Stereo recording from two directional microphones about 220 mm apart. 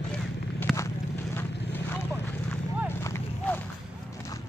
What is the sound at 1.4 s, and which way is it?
Vehicle, 10° left (ahead or behind).